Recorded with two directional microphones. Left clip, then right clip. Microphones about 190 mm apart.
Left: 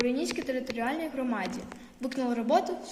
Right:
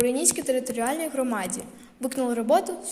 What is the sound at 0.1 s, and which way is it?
A woman's voice, 60° right (ahead or behind).